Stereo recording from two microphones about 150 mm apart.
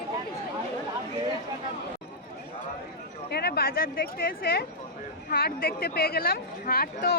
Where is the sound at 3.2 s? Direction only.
90° left.